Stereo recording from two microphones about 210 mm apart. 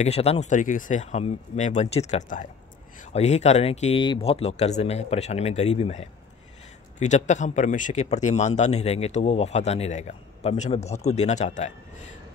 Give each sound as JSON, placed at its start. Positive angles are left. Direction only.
{"t": 0.0, "sound": "speech", "side_deg": 30}